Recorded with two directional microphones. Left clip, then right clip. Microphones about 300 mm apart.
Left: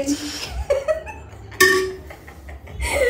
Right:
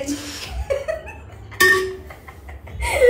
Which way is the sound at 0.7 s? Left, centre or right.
Centre.